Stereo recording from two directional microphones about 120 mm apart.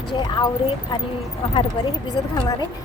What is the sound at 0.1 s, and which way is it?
Speech, 40° left (ahead or behind).